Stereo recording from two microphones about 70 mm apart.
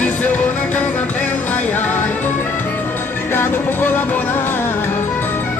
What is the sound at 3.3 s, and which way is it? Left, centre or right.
Music, left.